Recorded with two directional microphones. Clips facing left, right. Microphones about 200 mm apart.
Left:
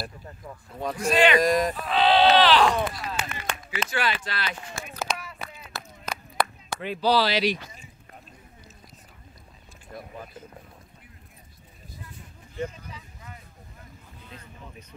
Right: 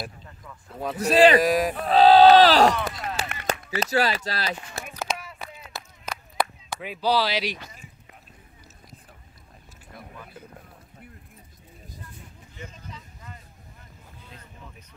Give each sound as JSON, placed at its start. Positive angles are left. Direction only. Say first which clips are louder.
{"t": 0.7, "sound": "a man's voice", "louder": "right 1 dB", "side_deg": -5}
{"t": 1.0, "sound": "speech", "louder": "right 4 dB", "side_deg": -35}
{"t": 1.4, "sound": "speech", "louder": "even", "side_deg": -5}
{"t": 1.9, "sound": "speech", "louder": "right 7 dB", "side_deg": -40}
{"t": 2.8, "sound": "a sound", "louder": "left 1 dB", "side_deg": -45}
{"t": 3.7, "sound": "speech", "louder": "right 4 dB", "side_deg": -40}
{"t": 5.2, "sound": "a sound", "louder": "even", "side_deg": -15}
{"t": 6.3, "sound": "speech", "louder": "even", "side_deg": -5}